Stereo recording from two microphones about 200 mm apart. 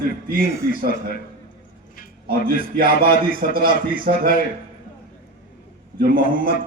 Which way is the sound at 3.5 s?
45° right (ahead or behind).